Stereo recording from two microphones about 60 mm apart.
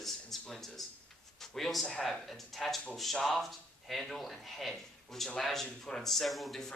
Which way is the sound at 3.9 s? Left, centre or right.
Centre.